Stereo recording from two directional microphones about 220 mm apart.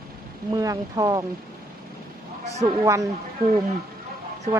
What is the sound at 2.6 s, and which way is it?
Speech, 15° right (ahead or behind).